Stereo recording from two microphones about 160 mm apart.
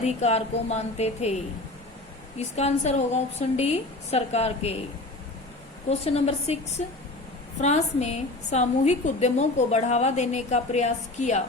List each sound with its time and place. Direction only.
0.0 s a woman's voice: 40° left (ahead or behind)
2.6 s a woman's voice: 45° left (ahead or behind)
6.1 s a woman's voice: 40° left (ahead or behind)